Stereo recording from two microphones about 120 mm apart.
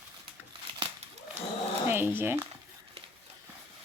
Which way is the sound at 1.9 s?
20° right (ahead or behind).